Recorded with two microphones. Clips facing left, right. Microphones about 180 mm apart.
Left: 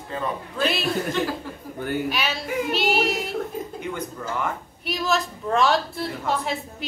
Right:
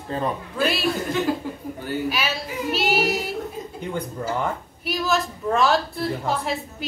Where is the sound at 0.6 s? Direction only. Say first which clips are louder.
Right 1 dB; 10° right (ahead or behind).